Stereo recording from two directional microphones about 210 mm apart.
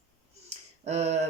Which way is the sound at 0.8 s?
30° right (ahead or behind).